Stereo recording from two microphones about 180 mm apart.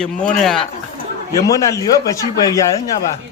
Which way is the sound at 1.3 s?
20° left (ahead or behind).